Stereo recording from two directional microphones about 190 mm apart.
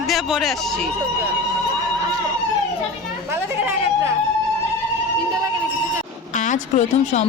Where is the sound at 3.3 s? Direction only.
10° right (ahead or behind).